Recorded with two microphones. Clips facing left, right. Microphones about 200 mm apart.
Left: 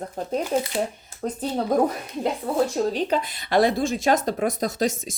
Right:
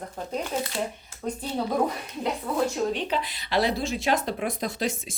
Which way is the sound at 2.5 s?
35° left (ahead or behind).